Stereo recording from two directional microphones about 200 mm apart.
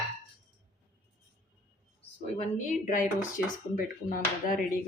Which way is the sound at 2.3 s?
35° left (ahead or behind).